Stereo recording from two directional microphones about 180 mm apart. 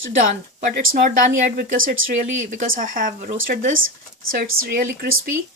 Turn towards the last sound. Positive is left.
turn(degrees=-50)  # may be behind; listen again after turning